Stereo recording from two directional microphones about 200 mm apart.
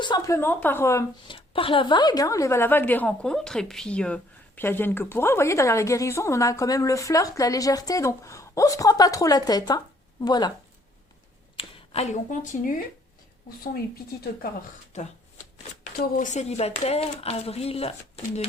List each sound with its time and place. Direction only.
0.0 s a woman's voice: 20° left (ahead or behind)
1.4 s a woman's voice: 25° left (ahead or behind)
11.5 s speech: 30° left (ahead or behind)
16.1 s speech: 40° left (ahead or behind)